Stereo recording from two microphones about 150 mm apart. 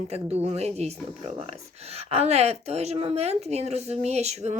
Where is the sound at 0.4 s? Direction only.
45° right (ahead or behind).